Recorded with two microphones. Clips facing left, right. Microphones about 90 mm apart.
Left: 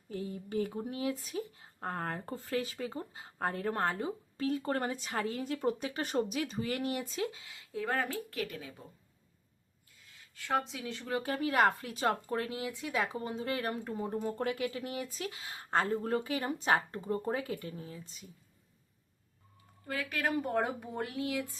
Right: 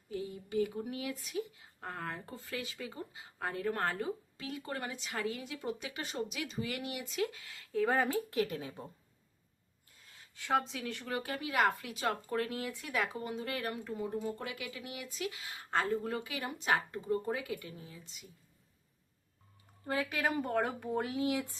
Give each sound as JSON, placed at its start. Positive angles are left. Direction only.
{"t": 0.1, "sound": "a sound", "side_deg": 40}
{"t": 0.7, "sound": "speech", "side_deg": 30}
{"t": 3.8, "sound": "speech", "side_deg": 25}
{"t": 4.4, "sound": "speech", "side_deg": 40}
{"t": 7.7, "sound": "speech", "side_deg": 0}
{"t": 8.0, "sound": "speech", "side_deg": -20}
{"t": 10.8, "sound": "speech", "side_deg": 25}
{"t": 13.8, "sound": "speech", "side_deg": 40}
{"t": 20.1, "sound": "speech", "side_deg": -10}
{"t": 20.6, "sound": "speech", "side_deg": 15}
{"t": 21.1, "sound": "speech", "side_deg": -20}